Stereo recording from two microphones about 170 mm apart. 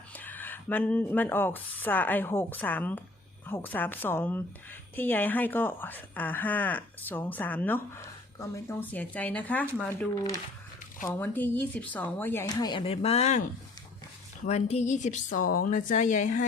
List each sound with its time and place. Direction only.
0.1 s speech: 10° left (ahead or behind)
9.9 s speech: 20° left (ahead or behind)
12.5 s speech: 25° left (ahead or behind); by 13.4 s 40° left (ahead or behind)
14.4 s speech: 40° left (ahead or behind)